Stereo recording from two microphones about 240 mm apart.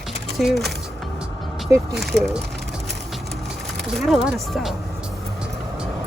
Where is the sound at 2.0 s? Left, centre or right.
Centre.